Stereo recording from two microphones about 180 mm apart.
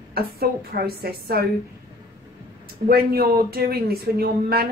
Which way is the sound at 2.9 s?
60° right (ahead or behind).